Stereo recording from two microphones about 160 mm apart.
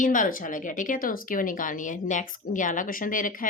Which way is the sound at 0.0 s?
55° left (ahead or behind).